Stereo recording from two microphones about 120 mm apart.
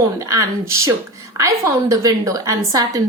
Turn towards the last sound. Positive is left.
turn(degrees=-30)  # may be behind; listen again after turning